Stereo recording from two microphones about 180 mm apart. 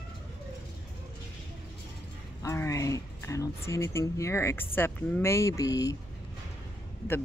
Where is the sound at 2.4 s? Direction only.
15° left (ahead or behind).